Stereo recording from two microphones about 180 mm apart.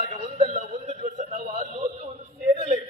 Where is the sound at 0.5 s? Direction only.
40° right (ahead or behind).